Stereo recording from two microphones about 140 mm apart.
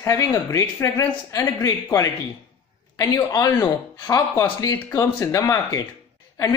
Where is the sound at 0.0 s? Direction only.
20° left (ahead or behind).